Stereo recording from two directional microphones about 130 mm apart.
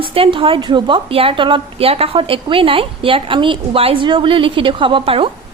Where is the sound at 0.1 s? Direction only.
45° right (ahead or behind).